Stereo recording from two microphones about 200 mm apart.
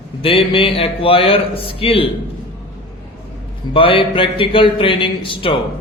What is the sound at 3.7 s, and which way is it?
Speech, 25° left (ahead or behind).